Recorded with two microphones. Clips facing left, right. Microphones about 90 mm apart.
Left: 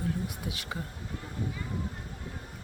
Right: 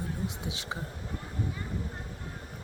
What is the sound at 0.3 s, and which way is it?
Speech, 25° right (ahead or behind).